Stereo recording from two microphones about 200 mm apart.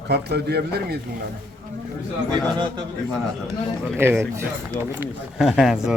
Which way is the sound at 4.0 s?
10° right (ahead or behind).